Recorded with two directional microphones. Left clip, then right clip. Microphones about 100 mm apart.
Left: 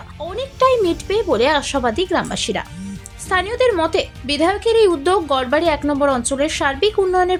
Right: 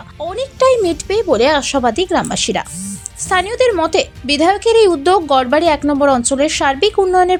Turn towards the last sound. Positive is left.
turn(degrees=-30)  # may be behind; listen again after turning